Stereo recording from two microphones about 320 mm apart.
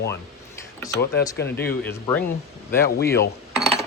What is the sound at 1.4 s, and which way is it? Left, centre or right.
Speech, left.